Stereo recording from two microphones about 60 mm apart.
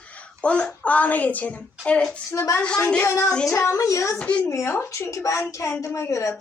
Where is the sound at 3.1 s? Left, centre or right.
Left.